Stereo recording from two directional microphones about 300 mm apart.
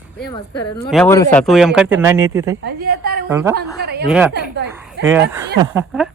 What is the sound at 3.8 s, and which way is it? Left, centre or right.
Speech, right.